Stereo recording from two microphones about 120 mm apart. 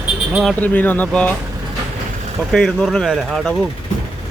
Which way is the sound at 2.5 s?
5° left (ahead or behind).